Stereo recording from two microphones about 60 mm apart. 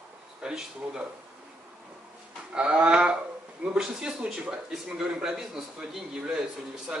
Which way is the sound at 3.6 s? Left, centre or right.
Centre.